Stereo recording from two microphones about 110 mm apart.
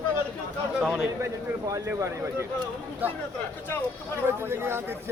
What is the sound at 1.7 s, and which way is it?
Speech, 25° right (ahead or behind).